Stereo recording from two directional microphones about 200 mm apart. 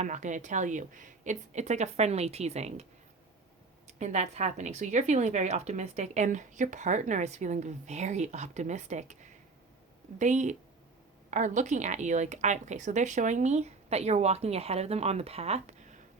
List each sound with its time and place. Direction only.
0.0 s a woman's voice: 40° right (ahead or behind)
3.8 s a woman's voice: 35° right (ahead or behind)
10.2 s a woman's voice: 35° right (ahead or behind)